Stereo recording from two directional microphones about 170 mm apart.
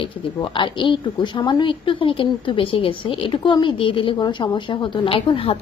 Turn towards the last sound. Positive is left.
turn(degrees=30)  # may be behind; listen again after turning